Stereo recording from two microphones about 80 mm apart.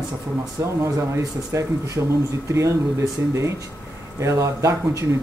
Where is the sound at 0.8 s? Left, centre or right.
Right.